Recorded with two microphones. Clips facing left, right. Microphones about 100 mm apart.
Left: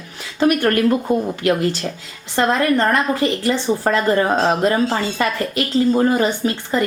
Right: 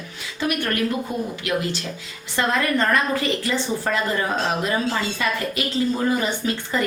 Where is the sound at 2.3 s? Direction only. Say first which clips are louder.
Left 5 dB; 35° left (ahead or behind).